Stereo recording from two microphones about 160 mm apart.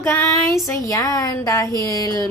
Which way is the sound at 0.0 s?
15° left (ahead or behind).